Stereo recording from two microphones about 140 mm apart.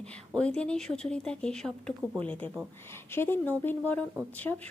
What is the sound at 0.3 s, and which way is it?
Speech, 10° left (ahead or behind).